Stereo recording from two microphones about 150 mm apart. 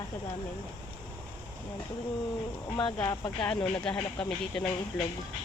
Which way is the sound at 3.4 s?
5° left (ahead or behind).